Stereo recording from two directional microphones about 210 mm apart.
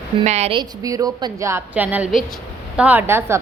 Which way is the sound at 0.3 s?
30° right (ahead or behind).